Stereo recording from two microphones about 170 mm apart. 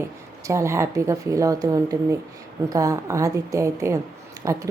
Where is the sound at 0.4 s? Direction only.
15° right (ahead or behind).